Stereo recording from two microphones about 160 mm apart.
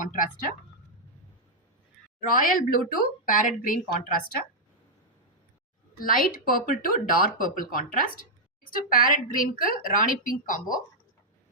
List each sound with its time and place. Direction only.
0.0 s a woman's voice: 55° left (ahead or behind)
2.3 s a woman's voice: 60° left (ahead or behind)
6.0 s a woman's voice: 60° left (ahead or behind)